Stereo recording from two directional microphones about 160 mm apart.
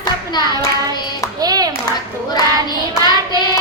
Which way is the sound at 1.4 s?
25° right (ahead or behind).